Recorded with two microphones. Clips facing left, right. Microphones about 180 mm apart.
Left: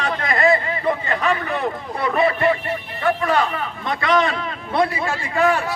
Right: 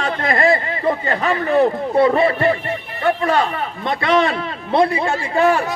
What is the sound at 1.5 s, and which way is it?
A man's voice, 30° right (ahead or behind).